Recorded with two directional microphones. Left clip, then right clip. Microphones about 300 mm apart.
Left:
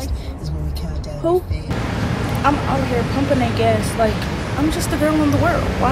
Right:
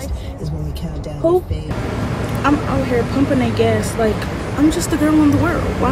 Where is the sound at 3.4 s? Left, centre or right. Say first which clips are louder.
Right 1 dB; centre.